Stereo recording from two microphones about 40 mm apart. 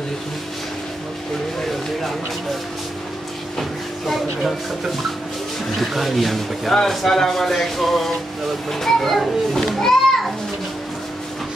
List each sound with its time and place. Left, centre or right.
5.8 s a child's voice: centre